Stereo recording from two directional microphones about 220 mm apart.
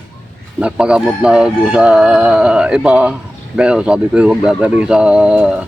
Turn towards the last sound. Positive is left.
turn(degrees=-5)  # may be behind; listen again after turning